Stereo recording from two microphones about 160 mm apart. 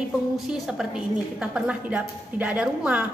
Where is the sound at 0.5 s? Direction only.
5° right (ahead or behind).